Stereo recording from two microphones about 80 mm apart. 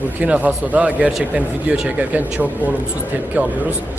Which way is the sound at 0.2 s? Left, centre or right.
Centre.